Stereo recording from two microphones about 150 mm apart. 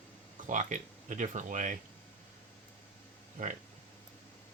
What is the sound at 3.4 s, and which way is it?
Speech, 60° right (ahead or behind).